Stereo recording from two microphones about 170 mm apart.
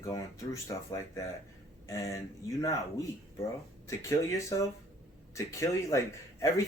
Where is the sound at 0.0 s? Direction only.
20° left (ahead or behind).